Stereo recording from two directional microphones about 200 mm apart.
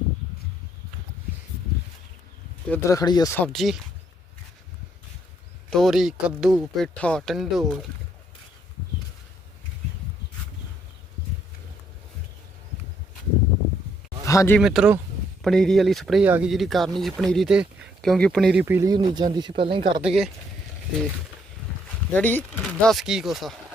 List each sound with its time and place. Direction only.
2.6 s speech: 10° left (ahead or behind)
5.7 s speech: centre (ahead or behind)
14.3 s speech: 15° left (ahead or behind)
14.6 s speech: centre (ahead or behind)
18.6 s speech: 15° right (ahead or behind)
20.0 s speech: centre (ahead or behind)
22.1 s speech: 10° left (ahead or behind)